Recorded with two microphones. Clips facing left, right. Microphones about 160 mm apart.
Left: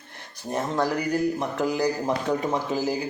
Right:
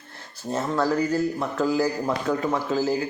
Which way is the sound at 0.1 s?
15° left (ahead or behind).